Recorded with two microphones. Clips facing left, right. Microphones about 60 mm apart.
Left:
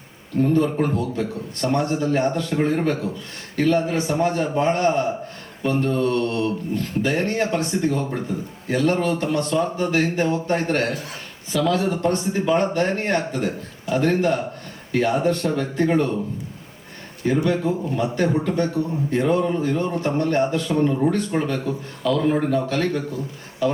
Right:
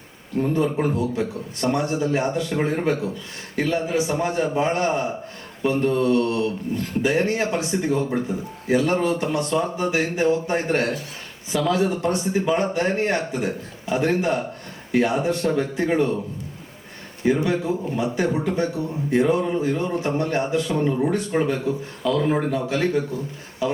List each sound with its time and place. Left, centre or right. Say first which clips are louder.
0.5 s a man's voice: even; centre
17.2 s a man's voice: even; centre